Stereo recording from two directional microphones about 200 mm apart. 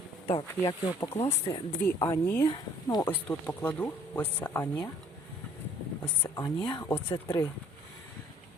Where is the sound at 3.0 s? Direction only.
10° left (ahead or behind).